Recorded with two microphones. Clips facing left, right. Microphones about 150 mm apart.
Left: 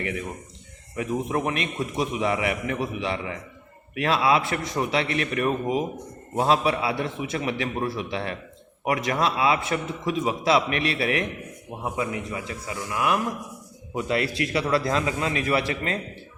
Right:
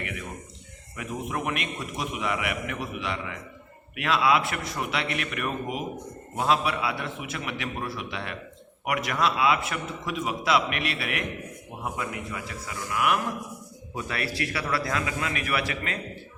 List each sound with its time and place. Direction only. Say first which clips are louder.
0.9 s a man's voice: left 6 dB; 30° left (ahead or behind)
11.8 s a man's voice: left 4 dB; 20° left (ahead or behind)